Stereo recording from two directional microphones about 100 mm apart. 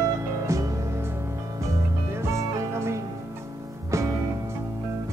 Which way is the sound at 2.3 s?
30° right (ahead or behind).